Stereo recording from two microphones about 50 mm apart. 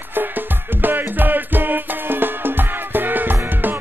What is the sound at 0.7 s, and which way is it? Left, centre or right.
Music, right.